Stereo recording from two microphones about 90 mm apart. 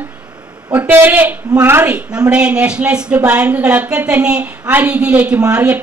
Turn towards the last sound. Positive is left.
turn(degrees=-15)  # may be behind; listen again after turning